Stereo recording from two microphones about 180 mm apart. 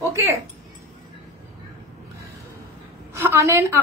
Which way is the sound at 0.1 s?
15° right (ahead or behind).